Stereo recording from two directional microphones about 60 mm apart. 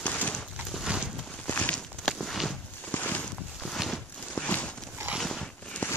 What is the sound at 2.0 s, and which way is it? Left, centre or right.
Walk, centre.